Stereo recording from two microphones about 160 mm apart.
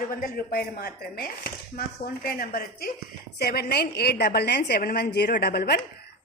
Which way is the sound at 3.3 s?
85° left.